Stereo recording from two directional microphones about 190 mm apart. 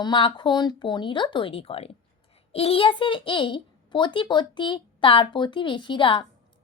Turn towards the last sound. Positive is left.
turn(degrees=25)  # may be behind; listen again after turning